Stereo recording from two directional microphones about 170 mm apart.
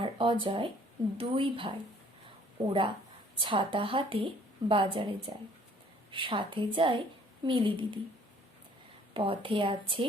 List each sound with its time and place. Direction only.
0.0 s a woman's voice: 30° right (ahead or behind)
9.1 s speech: 30° right (ahead or behind)